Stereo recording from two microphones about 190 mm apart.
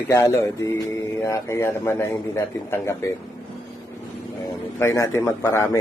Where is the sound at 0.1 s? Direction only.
15° left (ahead or behind).